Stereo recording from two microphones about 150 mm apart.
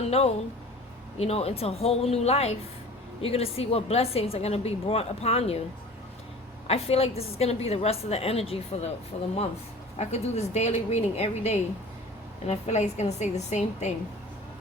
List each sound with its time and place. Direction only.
0.1 s a woman's voice: 45° left (ahead or behind)
6.7 s a woman's voice: 45° left (ahead or behind)